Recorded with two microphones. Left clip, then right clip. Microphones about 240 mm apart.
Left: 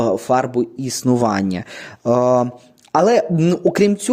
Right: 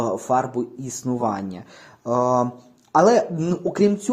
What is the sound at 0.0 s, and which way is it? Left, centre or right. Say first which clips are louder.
Speech: left 5 dB; left.